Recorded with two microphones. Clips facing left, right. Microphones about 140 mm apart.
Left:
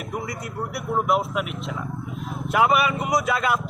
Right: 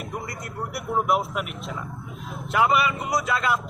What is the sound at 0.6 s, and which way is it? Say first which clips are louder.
Speech: left 1 dB; centre (ahead or behind).